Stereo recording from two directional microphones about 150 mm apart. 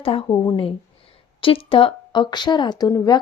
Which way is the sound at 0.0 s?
40° left (ahead or behind).